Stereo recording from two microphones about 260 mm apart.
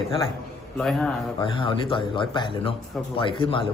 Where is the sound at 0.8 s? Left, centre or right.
Centre.